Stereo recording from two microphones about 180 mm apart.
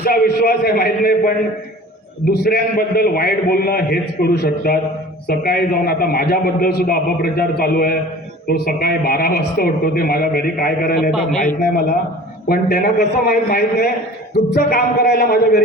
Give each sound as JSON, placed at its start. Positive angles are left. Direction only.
{"t": 0.0, "sound": "a man's voice", "side_deg": 60}
{"t": 2.4, "sound": "a man's voice", "side_deg": 60}
{"t": 11.1, "sound": "a man's voice", "side_deg": 0}
{"t": 11.4, "sound": "a man's voice", "side_deg": 60}